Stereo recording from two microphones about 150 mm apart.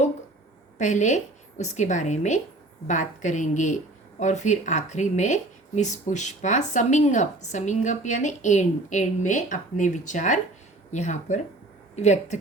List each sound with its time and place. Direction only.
0.8 s a woman's voice: 55° left (ahead or behind)